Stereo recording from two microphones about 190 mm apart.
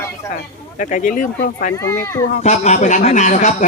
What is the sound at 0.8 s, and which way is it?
Speech, 40° left (ahead or behind).